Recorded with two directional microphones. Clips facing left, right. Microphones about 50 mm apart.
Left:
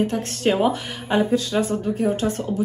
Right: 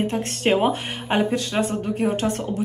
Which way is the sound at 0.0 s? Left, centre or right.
Right.